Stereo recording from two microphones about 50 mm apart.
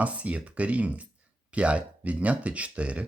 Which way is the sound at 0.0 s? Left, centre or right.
Right.